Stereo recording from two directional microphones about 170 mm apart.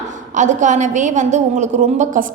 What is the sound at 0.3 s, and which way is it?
A woman's voice, 45° right (ahead or behind).